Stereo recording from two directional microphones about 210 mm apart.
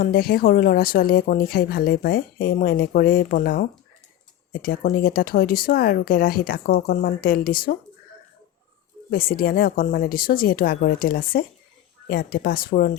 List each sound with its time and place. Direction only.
0.0 s speech: 45° left (ahead or behind)
9.0 s speech: 45° left (ahead or behind)